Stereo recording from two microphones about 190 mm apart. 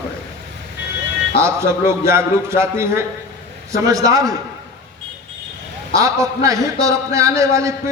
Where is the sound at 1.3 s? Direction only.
15° right (ahead or behind).